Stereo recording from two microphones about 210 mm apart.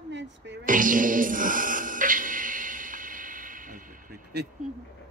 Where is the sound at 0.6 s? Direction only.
40° right (ahead or behind).